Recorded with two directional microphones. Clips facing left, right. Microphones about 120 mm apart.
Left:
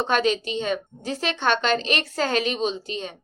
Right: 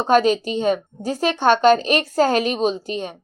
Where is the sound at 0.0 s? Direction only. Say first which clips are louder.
Right 6 dB; 40° right (ahead or behind).